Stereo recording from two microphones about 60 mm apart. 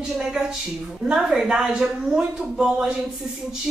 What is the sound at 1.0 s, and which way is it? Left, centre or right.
Speech, centre.